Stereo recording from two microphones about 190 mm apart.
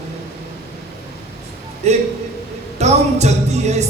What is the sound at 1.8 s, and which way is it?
Music, 35° right (ahead or behind).